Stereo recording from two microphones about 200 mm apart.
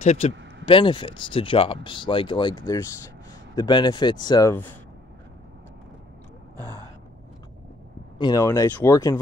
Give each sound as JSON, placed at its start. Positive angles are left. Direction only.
{"t": 0.0, "sound": "speech", "side_deg": 35}
{"t": 8.2, "sound": "speech", "side_deg": 15}